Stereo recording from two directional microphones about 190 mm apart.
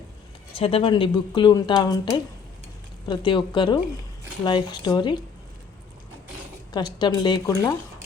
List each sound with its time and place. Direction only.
0.5 s speech: 30° left (ahead or behind)
6.7 s speech: 20° left (ahead or behind)